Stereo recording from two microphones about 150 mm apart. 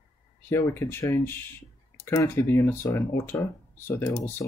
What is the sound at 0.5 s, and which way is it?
Speech, 15° left (ahead or behind).